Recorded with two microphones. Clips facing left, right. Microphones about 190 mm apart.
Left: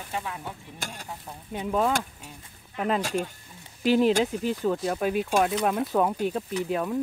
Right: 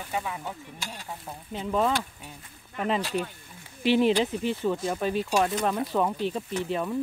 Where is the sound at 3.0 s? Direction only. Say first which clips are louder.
Left 1 dB; 45° left (ahead or behind).